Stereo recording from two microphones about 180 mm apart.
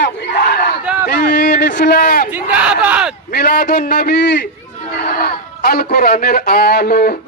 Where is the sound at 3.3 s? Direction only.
60° left (ahead or behind).